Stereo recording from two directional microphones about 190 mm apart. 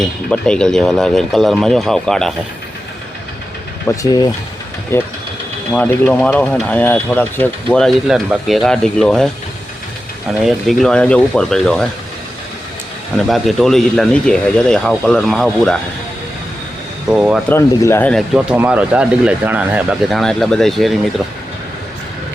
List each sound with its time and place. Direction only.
0.0 s speech: 5° left (ahead or behind)
3.8 s speech: 20° left (ahead or behind)
5.7 s speech: 5° left (ahead or behind)
10.4 s speech: centre (ahead or behind)
13.1 s speech: centre (ahead or behind)
17.1 s speech: 5° right (ahead or behind)
17.5 s speech: 10° left (ahead or behind)